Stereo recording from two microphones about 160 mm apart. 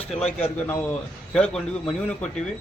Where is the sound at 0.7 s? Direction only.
10° left (ahead or behind).